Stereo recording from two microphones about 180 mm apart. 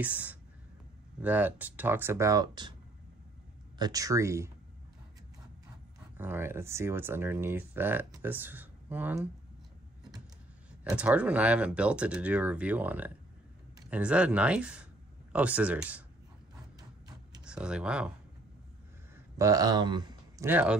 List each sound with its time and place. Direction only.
0.0 s speech: 10° right (ahead or behind); by 2.7 s 25° right (ahead or behind)
3.7 s speech: 20° right (ahead or behind)
6.1 s speech: 10° right (ahead or behind)
11.0 s speech: 5° right (ahead or behind)
17.5 s speech: 5° right (ahead or behind)
19.1 s a sound: 20° right (ahead or behind)
20.4 s speech: 10° right (ahead or behind)